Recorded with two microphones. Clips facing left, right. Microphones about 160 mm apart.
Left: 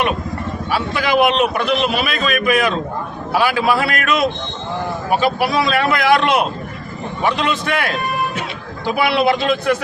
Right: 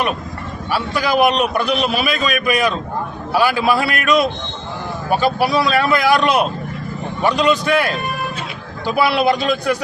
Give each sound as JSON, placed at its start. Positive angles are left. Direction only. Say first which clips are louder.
{"t": 0.7, "sound": "a man's voice", "louder": "even", "side_deg": 0}